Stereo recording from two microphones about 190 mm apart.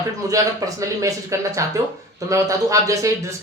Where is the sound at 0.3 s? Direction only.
15° right (ahead or behind).